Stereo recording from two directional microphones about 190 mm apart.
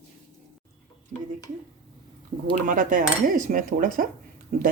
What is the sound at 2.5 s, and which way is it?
Cutlery, 45° right (ahead or behind).